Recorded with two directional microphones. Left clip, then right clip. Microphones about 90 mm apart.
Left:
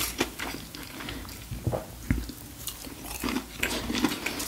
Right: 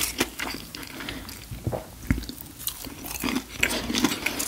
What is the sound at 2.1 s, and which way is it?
Biting, 30° right (ahead or behind).